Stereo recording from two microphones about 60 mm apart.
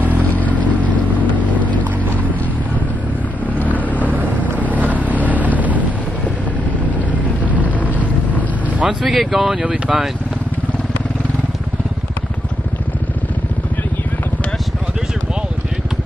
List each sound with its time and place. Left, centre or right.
0.2 s vehicle: left
3.5 s vehicle: left
4.0 s vehicle: right
7.5 s vehicle: left
8.8 s speech: centre